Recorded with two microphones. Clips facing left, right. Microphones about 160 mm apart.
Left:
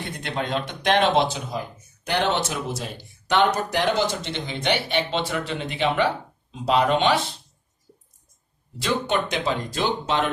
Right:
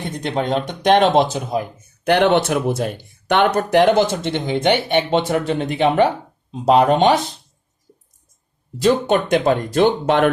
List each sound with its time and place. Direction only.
0.2 s speech: 40° right (ahead or behind)
2.0 s speech: 60° right (ahead or behind); by 7.3 s 40° right (ahead or behind)
8.8 s speech: 45° right (ahead or behind)